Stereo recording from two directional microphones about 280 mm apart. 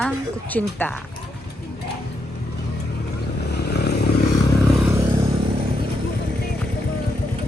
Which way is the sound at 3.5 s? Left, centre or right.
Left.